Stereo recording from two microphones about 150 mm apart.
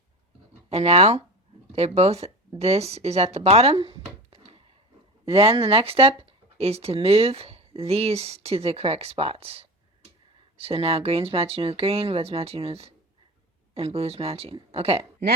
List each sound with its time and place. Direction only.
0.7 s speech: 45° right (ahead or behind)